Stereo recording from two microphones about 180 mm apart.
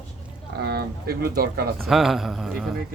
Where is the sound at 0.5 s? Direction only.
60° right (ahead or behind).